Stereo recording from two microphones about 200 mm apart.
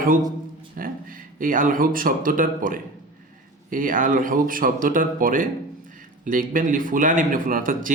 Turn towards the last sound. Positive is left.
turn(degrees=-45)  # may be behind; listen again after turning